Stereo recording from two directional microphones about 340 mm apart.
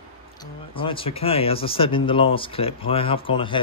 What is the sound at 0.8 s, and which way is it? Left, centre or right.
Speech, centre.